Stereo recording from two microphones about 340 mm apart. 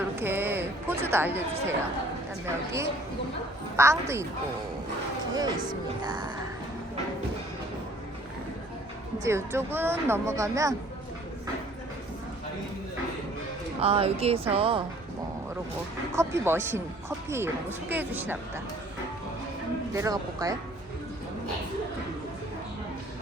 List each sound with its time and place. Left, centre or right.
0.0 s a sound: centre
3.8 s speech: centre
5.3 s speech: centre
9.2 s speech: centre
13.8 s speech: centre
16.1 s speech: centre
19.9 s speech: centre